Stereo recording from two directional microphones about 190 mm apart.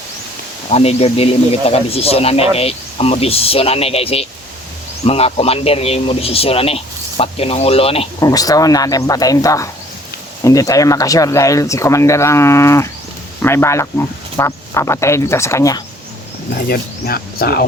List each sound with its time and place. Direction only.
0.7 s speech: 35° left (ahead or behind)
8.2 s speech: 20° left (ahead or behind)
16.6 s speech: 55° left (ahead or behind)